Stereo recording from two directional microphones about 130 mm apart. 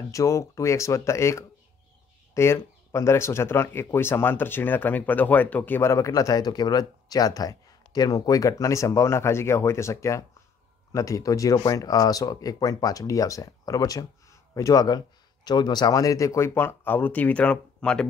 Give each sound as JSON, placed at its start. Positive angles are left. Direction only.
{"t": 0.1, "sound": "speech", "side_deg": 25}